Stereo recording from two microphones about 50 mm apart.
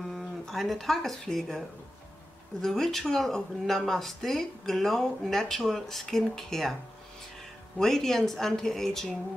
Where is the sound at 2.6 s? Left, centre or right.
Centre.